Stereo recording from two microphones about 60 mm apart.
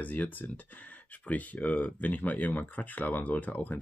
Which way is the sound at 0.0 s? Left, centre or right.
Left.